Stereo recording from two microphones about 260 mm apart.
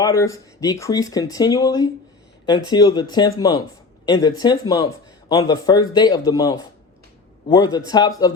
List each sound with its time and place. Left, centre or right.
0.0 s speech: centre